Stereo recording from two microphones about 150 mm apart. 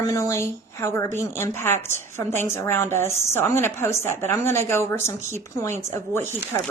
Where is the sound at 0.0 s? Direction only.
20° left (ahead or behind).